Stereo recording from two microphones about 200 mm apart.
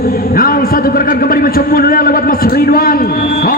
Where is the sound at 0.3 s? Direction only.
45° left (ahead or behind).